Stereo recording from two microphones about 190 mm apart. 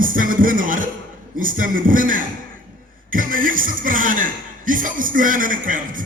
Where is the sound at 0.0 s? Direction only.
45° right (ahead or behind).